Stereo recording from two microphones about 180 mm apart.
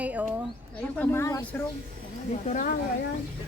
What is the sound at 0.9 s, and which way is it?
Speech, 15° left (ahead or behind).